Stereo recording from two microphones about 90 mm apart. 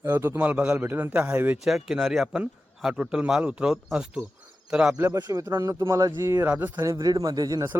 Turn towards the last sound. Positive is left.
turn(degrees=-45)  # may be behind; listen again after turning